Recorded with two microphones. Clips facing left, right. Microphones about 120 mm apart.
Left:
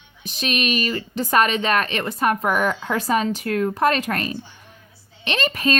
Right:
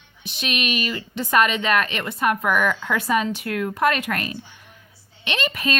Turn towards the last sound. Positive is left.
turn(degrees=40)  # may be behind; listen again after turning